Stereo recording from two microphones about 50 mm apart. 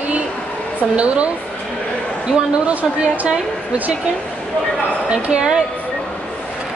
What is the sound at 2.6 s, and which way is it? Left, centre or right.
Speech, right.